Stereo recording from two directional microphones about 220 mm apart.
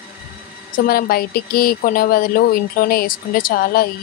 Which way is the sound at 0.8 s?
40° left (ahead or behind).